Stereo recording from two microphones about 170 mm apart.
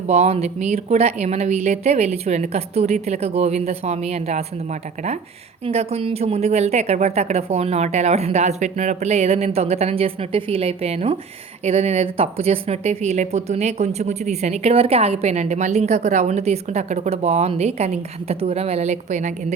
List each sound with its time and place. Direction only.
0.1 s speech: 35° right (ahead or behind)
5.6 s speech: 35° right (ahead or behind)